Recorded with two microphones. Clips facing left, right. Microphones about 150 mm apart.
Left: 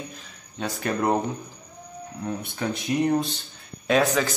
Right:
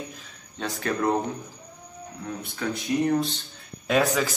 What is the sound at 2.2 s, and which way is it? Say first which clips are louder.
Speech: left 2 dB; 25° left (ahead or behind).